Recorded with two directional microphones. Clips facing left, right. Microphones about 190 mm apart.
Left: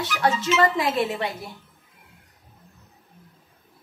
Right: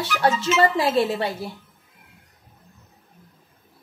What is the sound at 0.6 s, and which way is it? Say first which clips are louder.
Speech: right 3 dB; 30° right (ahead or behind).